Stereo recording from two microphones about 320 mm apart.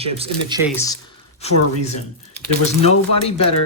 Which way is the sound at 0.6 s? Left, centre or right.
Centre.